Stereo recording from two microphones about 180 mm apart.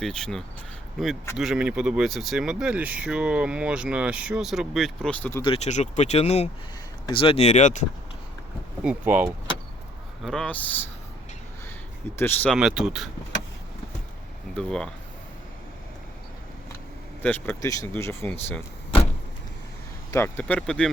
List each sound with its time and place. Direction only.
0.0 s speech: 5° left (ahead or behind)
5.4 s speech: 35° left (ahead or behind)
8.8 s speech: 5° right (ahead or behind)
10.2 s speech: 5° left (ahead or behind)
12.1 s speech: 10° left (ahead or behind)
12.5 s speech: centre (ahead or behind)
14.5 s speech: 5° left (ahead or behind)
17.2 s speech: 10° left (ahead or behind)
20.1 s speech: 10° left (ahead or behind)